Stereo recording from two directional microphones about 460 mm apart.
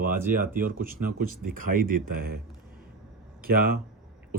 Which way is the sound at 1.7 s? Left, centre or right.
Right.